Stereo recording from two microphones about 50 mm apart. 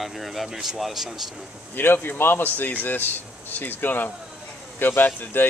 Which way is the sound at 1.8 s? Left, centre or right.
Left.